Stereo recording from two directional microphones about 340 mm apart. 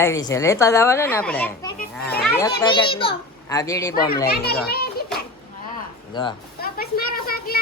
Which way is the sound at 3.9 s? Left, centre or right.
Left.